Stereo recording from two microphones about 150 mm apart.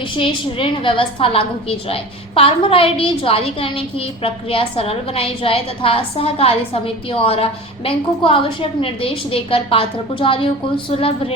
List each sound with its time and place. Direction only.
0.2 s a woman's voice: 35° left (ahead or behind)